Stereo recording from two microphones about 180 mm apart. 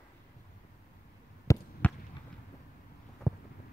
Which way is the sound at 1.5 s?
10° left (ahead or behind).